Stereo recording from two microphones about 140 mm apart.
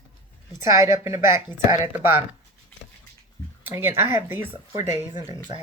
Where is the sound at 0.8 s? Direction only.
20° right (ahead or behind).